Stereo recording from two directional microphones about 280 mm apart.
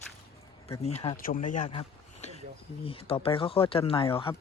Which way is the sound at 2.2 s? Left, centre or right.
Left.